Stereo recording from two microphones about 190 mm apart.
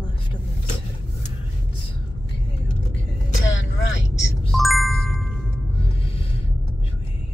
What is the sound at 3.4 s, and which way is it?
Vehicle, 80° left.